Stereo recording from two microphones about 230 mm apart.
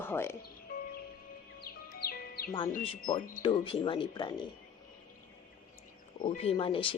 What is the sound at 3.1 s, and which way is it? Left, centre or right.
Speech, left.